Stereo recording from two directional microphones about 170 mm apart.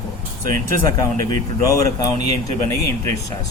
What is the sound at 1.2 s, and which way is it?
Speech, 20° left (ahead or behind).